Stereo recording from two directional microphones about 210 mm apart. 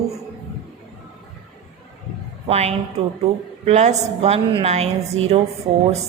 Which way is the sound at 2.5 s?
30° right (ahead or behind).